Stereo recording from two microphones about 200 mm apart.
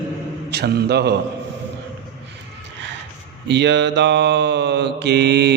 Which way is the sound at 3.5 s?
60° right (ahead or behind).